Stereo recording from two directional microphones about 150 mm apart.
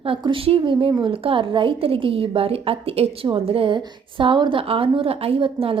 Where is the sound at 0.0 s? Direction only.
35° right (ahead or behind).